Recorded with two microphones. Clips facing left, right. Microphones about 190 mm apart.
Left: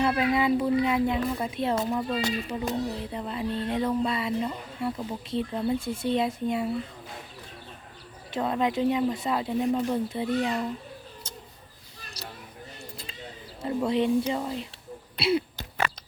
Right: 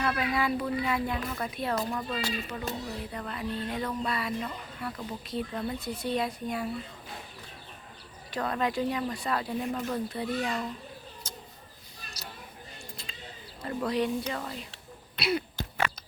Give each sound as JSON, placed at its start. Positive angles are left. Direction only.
{"t": 0.0, "sound": "speech", "side_deg": 25}
{"t": 8.3, "sound": "speech", "side_deg": 20}
{"t": 12.2, "sound": "a sound", "side_deg": 30}
{"t": 13.8, "sound": "speech", "side_deg": 25}
{"t": 15.1, "sound": "throat clearing", "side_deg": 25}